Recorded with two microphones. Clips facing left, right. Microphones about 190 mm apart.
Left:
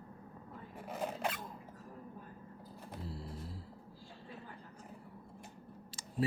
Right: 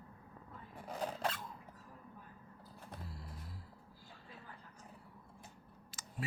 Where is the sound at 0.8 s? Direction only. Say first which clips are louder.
Left 1 dB; 10° left (ahead or behind).